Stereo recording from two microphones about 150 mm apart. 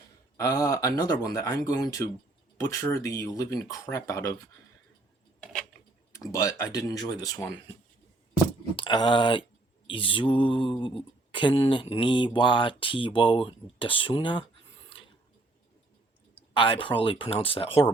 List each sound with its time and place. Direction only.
0.3 s speech: 20° left (ahead or behind)
6.1 s speech: 20° left (ahead or behind)
8.7 s speech: 35° left (ahead or behind)
9.8 s mantra: 35° left (ahead or behind)
16.6 s mantra: 35° left (ahead or behind)